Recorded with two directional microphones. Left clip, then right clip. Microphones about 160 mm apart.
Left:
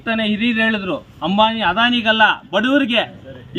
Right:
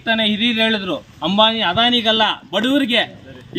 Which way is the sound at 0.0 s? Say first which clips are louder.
Right 2 dB; 5° right (ahead or behind).